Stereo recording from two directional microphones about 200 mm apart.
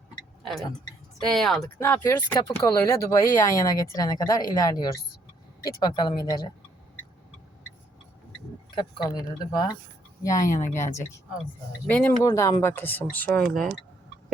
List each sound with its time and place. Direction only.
1.2 s speech: centre (ahead or behind); by 6.5 s 20° left (ahead or behind)
8.7 s speech: 25° left (ahead or behind); by 13.7 s centre (ahead or behind)